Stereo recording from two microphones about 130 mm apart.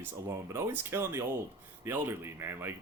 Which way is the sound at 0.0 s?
20° right (ahead or behind).